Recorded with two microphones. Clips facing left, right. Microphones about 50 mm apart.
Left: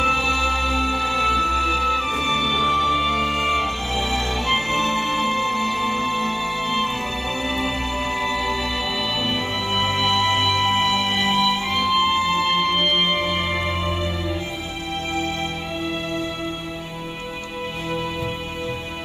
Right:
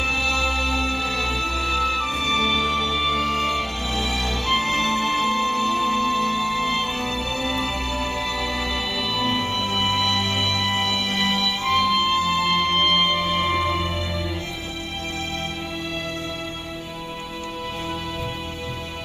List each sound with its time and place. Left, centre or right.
0.0 s music: centre
2.8 s music: left
4.6 s music: left